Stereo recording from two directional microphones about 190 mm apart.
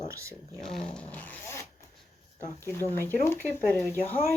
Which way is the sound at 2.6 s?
10° left (ahead or behind).